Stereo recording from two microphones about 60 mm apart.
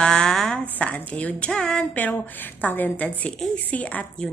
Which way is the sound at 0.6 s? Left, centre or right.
Left.